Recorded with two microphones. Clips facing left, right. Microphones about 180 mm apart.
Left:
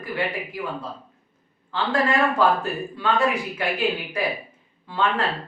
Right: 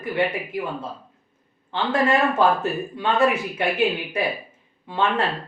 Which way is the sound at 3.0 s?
25° right (ahead or behind).